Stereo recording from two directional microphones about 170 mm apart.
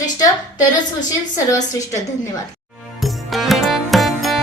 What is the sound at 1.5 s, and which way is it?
Speech, 20° left (ahead or behind).